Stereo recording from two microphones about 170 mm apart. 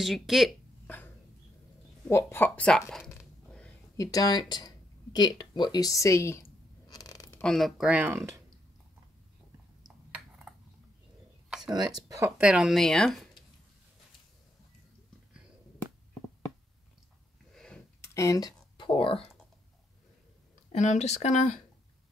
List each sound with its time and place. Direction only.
0.0 s speech: centre (ahead or behind)
0.8 s dog: 10° left (ahead or behind)
2.0 s speech: 15° left (ahead or behind)
3.9 s speech: 20° left (ahead or behind)
6.9 s a sound: 20° left (ahead or behind)
7.4 s speech: centre (ahead or behind)
9.8 s a sound: 5° right (ahead or behind)
11.7 s speech: 25° right (ahead or behind)
12.4 s speech: 5° right (ahead or behind)
17.6 s a sound: 5° left (ahead or behind)
18.0 s speech: 20° left (ahead or behind); by 19.3 s 35° left (ahead or behind)
20.7 s speech: 45° left (ahead or behind)